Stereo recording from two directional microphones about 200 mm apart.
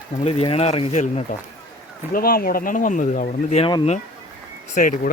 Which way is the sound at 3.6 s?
25° left (ahead or behind).